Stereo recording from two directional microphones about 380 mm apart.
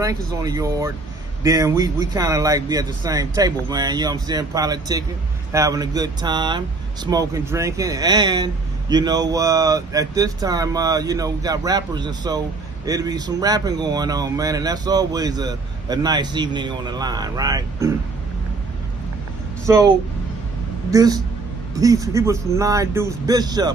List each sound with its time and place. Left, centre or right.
0.0 s speech: centre
19.6 s speech: centre
20.9 s speech: centre